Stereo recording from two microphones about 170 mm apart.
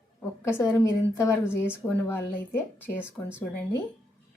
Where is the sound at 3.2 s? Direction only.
5° left (ahead or behind).